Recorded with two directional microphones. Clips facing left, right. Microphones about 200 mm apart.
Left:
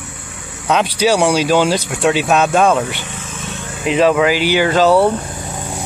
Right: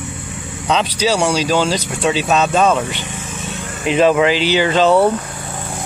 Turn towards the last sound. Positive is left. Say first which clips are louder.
# left 2 dB
turn(degrees=15)  # may be behind; listen again after turning